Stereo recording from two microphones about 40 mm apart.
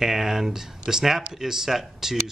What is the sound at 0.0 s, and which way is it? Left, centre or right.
Speech, centre.